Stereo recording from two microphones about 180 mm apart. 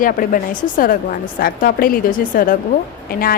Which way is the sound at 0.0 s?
50° left (ahead or behind).